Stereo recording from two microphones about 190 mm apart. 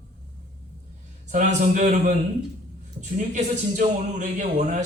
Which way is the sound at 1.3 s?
40° right (ahead or behind).